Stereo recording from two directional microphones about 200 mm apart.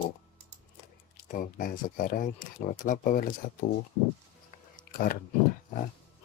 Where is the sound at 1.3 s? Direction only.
45° left (ahead or behind).